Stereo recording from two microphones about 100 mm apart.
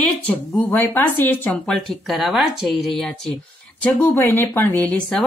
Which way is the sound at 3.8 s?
15° left (ahead or behind).